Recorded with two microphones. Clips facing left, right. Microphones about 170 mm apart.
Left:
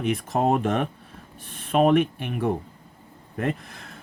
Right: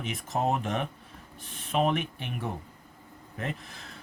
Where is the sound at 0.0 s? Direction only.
55° left (ahead or behind).